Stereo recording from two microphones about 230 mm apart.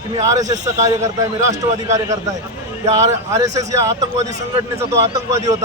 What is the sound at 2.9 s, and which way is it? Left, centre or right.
A man's voice, centre.